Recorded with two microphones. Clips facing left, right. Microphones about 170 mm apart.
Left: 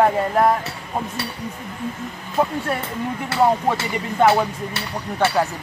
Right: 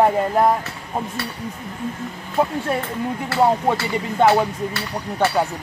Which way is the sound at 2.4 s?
15° right (ahead or behind).